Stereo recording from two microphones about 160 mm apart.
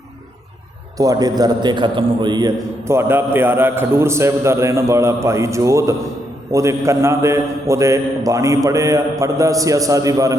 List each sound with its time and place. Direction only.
0.9 s a man's voice: 25° right (ahead or behind)